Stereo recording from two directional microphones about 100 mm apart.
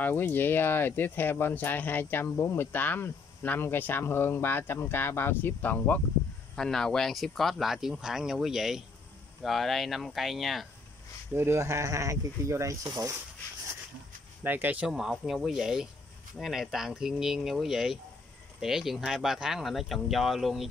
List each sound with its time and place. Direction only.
0.0 s speech: 20° left (ahead or behind)
6.5 s speech: 5° left (ahead or behind)
11.3 s speech: 25° right (ahead or behind)
12.8 s speech: 40° right (ahead or behind)
14.4 s speech: 20° right (ahead or behind)
14.9 s speech: 5° right (ahead or behind)